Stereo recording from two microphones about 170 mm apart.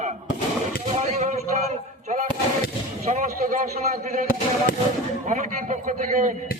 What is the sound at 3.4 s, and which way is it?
Speech, 55° right (ahead or behind).